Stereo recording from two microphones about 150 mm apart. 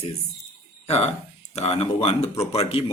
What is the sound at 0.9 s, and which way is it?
Speech, 45° left (ahead or behind).